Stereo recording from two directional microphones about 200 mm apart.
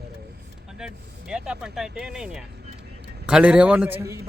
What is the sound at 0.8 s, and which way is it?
A man's voice, 5° right (ahead or behind).